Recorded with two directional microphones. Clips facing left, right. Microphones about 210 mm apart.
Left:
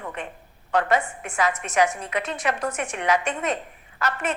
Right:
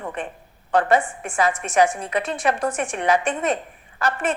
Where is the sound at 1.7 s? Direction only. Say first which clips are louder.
Right 4 dB; 30° right (ahead or behind).